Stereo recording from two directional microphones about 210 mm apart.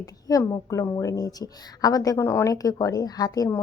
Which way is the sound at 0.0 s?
15° left (ahead or behind).